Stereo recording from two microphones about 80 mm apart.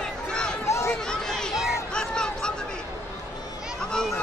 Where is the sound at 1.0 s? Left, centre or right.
Centre.